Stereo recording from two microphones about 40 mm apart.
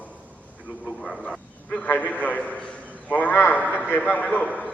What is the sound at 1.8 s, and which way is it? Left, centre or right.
A man's voice, left.